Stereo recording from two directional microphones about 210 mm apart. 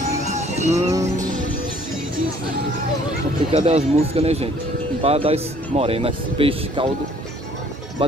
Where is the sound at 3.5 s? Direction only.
30° right (ahead or behind).